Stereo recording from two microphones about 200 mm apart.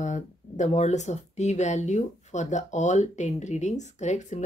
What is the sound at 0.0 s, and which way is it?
Speech, 35° left (ahead or behind).